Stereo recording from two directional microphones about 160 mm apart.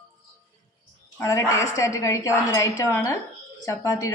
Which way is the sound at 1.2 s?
20° left (ahead or behind).